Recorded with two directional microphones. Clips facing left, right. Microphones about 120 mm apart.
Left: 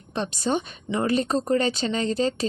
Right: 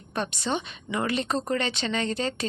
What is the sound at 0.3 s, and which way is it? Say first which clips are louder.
A woman's voice: left 4 dB; 40° left (ahead or behind).